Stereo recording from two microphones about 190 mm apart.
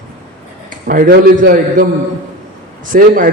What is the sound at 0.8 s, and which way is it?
A man's voice, 45° right (ahead or behind).